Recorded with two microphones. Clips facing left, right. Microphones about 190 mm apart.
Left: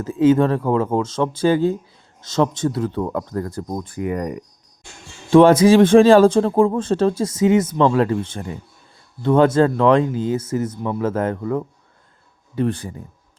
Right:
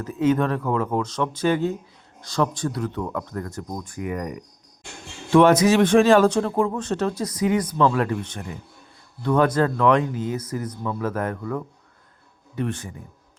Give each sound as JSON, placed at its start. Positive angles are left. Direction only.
{"t": 0.0, "sound": "speech", "side_deg": 30}